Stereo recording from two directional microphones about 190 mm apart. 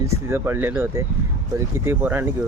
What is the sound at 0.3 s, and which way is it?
Speech, 10° right (ahead or behind).